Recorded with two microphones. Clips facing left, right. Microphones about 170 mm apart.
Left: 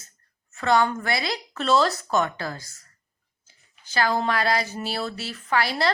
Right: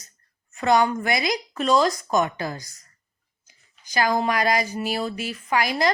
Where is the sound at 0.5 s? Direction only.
15° right (ahead or behind).